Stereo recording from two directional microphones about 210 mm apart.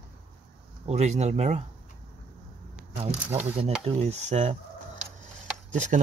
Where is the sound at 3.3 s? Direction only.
5° right (ahead or behind).